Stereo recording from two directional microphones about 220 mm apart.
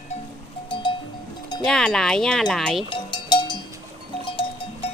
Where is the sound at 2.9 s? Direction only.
20° left (ahead or behind).